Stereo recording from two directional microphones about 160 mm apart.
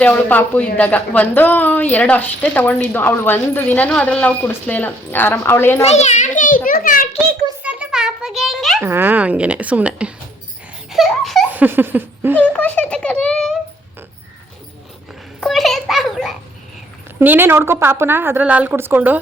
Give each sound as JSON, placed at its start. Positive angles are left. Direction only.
{"t": 0.0, "sound": "speech", "side_deg": 10}
{"t": 5.8, "sound": "a child's voice", "side_deg": 45}
{"t": 6.7, "sound": "a sound", "side_deg": 60}
{"t": 7.6, "sound": "a sound", "side_deg": -10}
{"t": 8.8, "sound": "a woman's voice", "side_deg": -15}
{"t": 10.9, "sound": "a sound", "side_deg": 0}
{"t": 11.5, "sound": "laughter", "side_deg": -10}
{"t": 12.4, "sound": "a child's voice", "side_deg": 10}
{"t": 15.4, "sound": "a child's voice", "side_deg": 0}
{"t": 17.2, "sound": "a woman's voice", "side_deg": -15}